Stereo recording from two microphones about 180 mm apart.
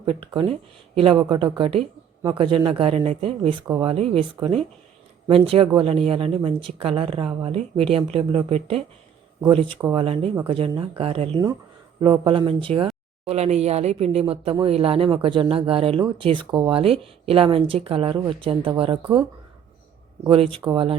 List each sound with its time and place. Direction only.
0.0 s speech: 30° right (ahead or behind)
20.2 s speech: 30° right (ahead or behind)